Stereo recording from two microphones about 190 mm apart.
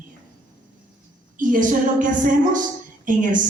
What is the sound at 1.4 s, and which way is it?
A woman's voice, 45° right (ahead or behind).